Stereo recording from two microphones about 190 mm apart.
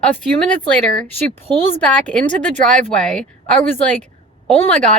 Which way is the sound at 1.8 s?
5° left (ahead or behind).